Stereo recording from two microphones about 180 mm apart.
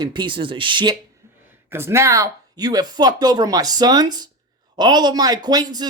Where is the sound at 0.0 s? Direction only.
25° right (ahead or behind).